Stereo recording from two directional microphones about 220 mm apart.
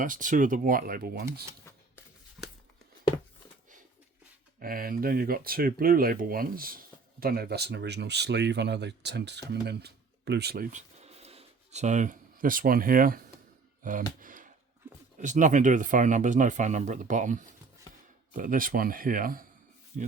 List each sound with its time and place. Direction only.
0.0 s speech: 35° right (ahead or behind)
4.6 s speech: 40° right (ahead or behind)
14.2 s a sound: 35° right (ahead or behind)
15.2 s speech: 35° right (ahead or behind)